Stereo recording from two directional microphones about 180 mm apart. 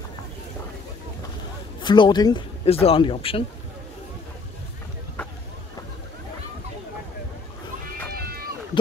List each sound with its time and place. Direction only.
1.8 s speech: 25° left (ahead or behind)
8.1 s run: 60° right (ahead or behind)